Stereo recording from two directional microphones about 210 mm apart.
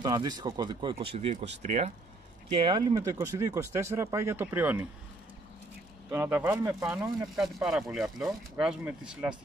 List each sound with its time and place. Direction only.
0.0 s speech: 20° right (ahead or behind); by 1.9 s 35° right (ahead or behind)
2.5 s speech: 20° right (ahead or behind)
6.1 s speech: 10° right (ahead or behind)
7.6 s speech: centre (ahead or behind)